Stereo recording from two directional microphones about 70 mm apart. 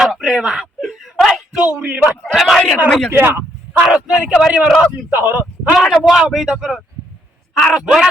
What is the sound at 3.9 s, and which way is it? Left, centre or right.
Speech, centre.